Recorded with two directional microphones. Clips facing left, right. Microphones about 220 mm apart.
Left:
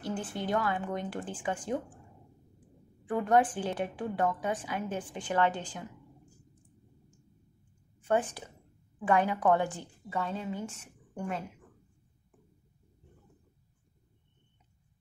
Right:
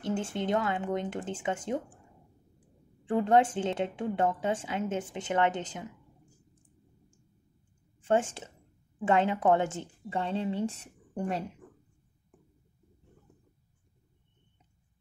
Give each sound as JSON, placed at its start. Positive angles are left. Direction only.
{"t": 0.0, "sound": "a woman's voice", "side_deg": -25}
{"t": 3.1, "sound": "a woman's voice", "side_deg": -25}
{"t": 8.1, "sound": "a woman's voice", "side_deg": -25}